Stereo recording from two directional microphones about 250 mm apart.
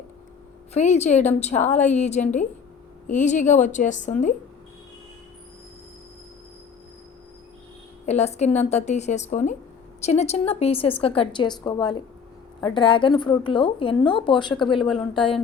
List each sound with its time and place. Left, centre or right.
0.7 s a woman's voice: left
8.0 s a woman's voice: left